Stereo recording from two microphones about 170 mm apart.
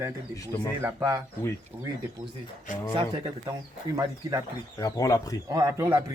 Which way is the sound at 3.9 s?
25° right (ahead or behind).